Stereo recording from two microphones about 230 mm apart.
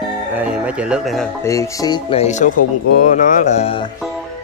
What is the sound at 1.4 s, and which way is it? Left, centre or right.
Speech, centre.